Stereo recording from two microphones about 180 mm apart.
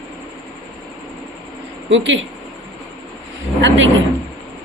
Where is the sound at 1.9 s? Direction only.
90° right.